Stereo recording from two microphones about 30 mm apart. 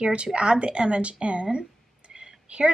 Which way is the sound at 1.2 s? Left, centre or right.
Right.